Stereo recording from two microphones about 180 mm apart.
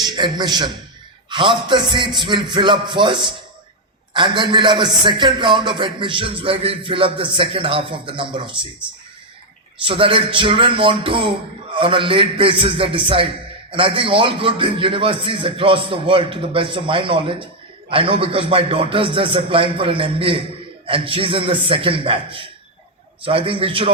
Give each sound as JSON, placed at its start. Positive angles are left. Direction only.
{"t": 0.0, "sound": "speech", "side_deg": -25}
{"t": 9.8, "sound": "speech", "side_deg": -30}